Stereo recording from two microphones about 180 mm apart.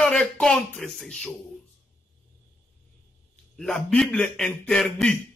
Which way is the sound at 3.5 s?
5° left (ahead or behind).